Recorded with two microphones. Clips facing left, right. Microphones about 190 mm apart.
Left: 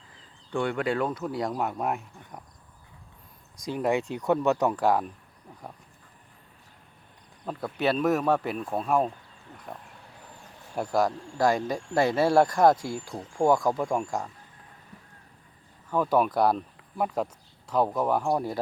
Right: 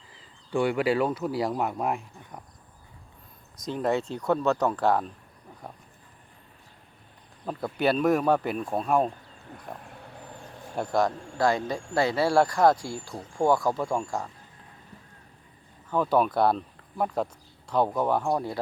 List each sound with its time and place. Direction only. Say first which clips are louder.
0.5 s speech: right 3 dB; 5° right (ahead or behind)
3.6 s speech: even; 10° left (ahead or behind)
7.4 s speech: right 1 dB; centre (ahead or behind)
15.9 s speech: even; 5° left (ahead or behind)